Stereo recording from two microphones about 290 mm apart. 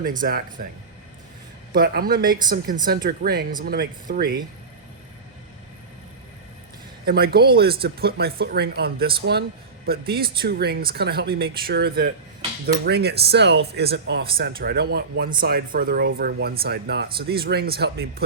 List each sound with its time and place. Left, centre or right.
0.0 s speech: right
1.7 s speech: right
7.0 s speech: right
10.4 s speech: right